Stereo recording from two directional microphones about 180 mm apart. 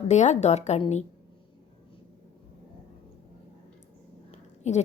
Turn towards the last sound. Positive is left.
turn(degrees=40)  # may be behind; listen again after turning